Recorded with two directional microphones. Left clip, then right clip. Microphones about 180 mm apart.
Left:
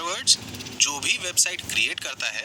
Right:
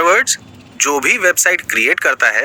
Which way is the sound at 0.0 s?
30° right (ahead or behind).